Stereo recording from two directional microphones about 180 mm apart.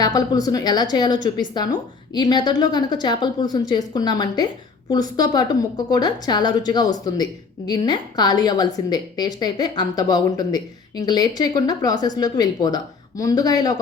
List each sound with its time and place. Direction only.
0.0 s a woman's voice: 20° left (ahead or behind)